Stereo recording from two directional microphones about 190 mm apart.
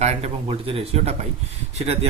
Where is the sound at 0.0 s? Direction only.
35° right (ahead or behind).